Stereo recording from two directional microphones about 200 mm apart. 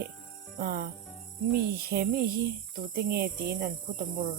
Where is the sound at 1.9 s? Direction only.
50° right (ahead or behind).